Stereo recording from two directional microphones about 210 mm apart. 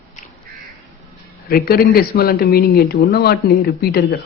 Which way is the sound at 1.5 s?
45° left (ahead or behind).